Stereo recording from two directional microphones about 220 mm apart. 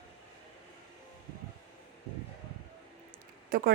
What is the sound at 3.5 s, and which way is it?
Speech, 40° right (ahead or behind).